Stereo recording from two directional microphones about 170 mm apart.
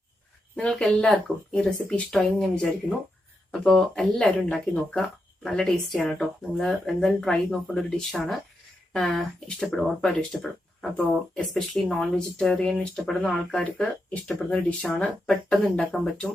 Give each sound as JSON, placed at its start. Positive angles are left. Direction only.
{"t": 0.5, "sound": "speech", "side_deg": 5}